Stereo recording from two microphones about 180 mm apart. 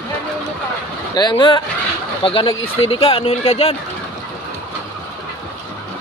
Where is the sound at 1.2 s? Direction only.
25° left (ahead or behind).